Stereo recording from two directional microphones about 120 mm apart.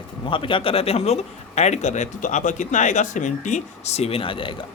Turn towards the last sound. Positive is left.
turn(degrees=45)  # may be behind; listen again after turning